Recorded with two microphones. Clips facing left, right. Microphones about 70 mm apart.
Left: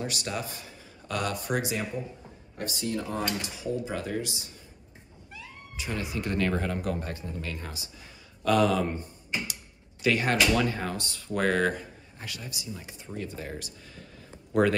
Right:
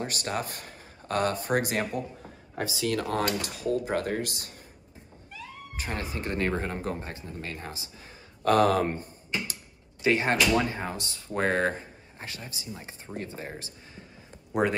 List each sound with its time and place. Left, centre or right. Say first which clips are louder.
0.0 s a man's voice: right 2 dB; right
2.8 s speech: right 3 dB; right
5.8 s speech: left 1 dB; right
8.5 s speech: right 2 dB; right
10.0 s speech: right 1 dB; right